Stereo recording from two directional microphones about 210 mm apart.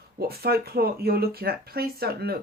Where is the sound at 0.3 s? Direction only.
45° right (ahead or behind).